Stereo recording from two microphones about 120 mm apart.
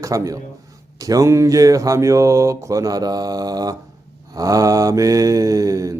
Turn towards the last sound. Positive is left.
turn(degrees=-30)  # may be behind; listen again after turning